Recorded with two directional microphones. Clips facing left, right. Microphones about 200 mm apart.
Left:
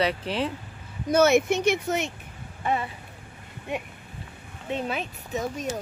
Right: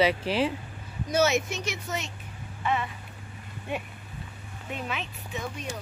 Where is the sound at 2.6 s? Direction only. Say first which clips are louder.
Left 2 dB; 35° left (ahead or behind).